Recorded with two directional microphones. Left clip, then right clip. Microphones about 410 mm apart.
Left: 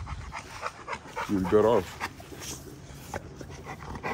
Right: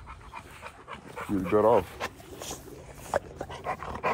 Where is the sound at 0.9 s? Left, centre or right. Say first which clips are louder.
Left 1 dB; centre.